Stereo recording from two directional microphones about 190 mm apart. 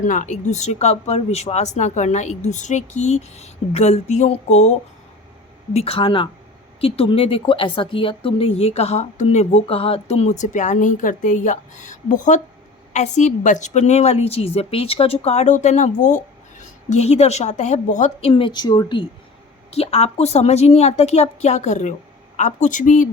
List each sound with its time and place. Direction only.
0.0 s a woman's voice: 40° left (ahead or behind); by 19.0 s 20° left (ahead or behind)
19.7 s a woman's voice: 35° left (ahead or behind)